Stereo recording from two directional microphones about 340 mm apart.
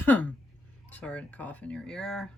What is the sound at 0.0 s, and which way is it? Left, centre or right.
Speech, centre.